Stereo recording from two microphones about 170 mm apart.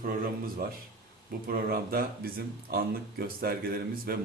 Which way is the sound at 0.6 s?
60° right (ahead or behind).